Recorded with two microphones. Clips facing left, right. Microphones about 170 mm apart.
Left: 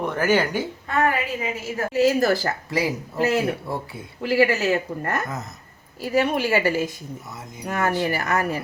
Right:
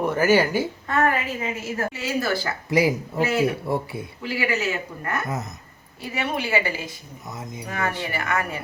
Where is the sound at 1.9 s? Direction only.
40° left (ahead or behind).